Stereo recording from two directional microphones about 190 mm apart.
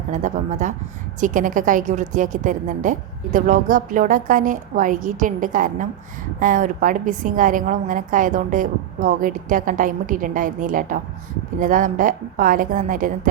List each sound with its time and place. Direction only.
0.1 s a woman's voice: 40° right (ahead or behind)